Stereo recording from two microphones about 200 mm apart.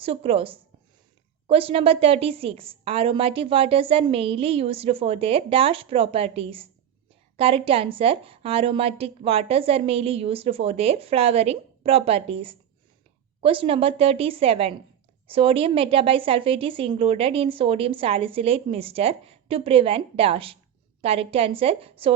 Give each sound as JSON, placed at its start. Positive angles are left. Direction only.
{"t": 0.0, "sound": "a woman's voice", "side_deg": -30}